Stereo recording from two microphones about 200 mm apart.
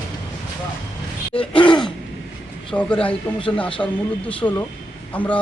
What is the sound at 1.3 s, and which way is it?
Gasp, 25° left (ahead or behind).